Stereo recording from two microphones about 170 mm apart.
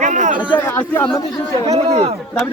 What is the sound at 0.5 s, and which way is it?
Speech, 10° left (ahead or behind).